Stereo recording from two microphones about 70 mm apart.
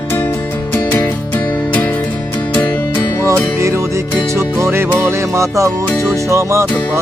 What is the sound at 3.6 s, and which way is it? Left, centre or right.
Music, right.